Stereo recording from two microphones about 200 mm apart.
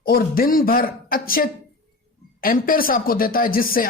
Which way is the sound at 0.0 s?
45° left (ahead or behind).